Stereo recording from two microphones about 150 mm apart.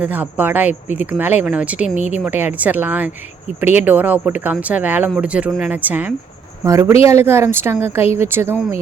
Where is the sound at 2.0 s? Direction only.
50° left (ahead or behind).